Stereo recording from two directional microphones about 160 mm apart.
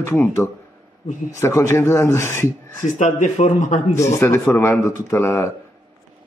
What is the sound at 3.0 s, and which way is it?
Speech, 50° left (ahead or behind).